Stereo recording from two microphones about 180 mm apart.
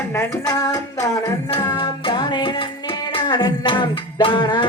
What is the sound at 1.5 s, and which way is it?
Music, 25° left (ahead or behind).